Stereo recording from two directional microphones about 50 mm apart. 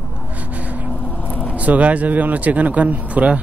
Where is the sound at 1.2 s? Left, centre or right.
Left.